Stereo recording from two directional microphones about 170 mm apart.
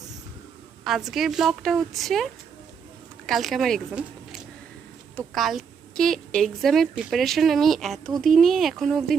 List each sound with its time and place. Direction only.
0.9 s a woman's voice: centre (ahead or behind)